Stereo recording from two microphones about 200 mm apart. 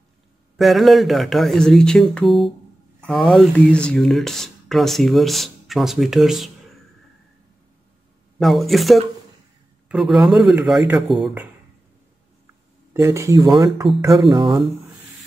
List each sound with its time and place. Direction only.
0.6 s speech: centre (ahead or behind)
8.4 s speech: centre (ahead or behind)
12.9 s speech: 15° right (ahead or behind)